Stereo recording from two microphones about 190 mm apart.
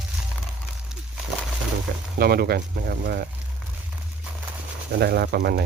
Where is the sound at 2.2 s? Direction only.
55° right (ahead or behind).